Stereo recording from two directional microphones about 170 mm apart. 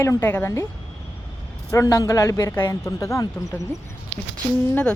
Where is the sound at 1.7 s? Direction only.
20° left (ahead or behind).